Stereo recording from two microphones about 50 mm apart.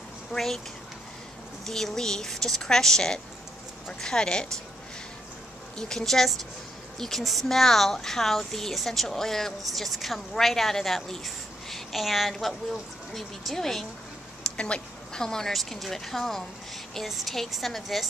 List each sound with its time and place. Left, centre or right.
0.3 s speech: centre
1.7 s speech: centre
5.8 s speech: centre
14.6 s speech: centre